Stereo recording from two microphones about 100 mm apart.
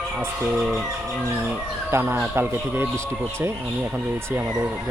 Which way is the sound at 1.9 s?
25° right (ahead or behind).